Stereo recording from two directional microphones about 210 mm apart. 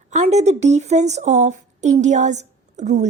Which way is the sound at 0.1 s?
35° right (ahead or behind).